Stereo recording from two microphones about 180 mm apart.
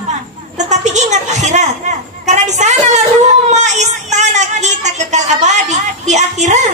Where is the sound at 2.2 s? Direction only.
40° right (ahead or behind).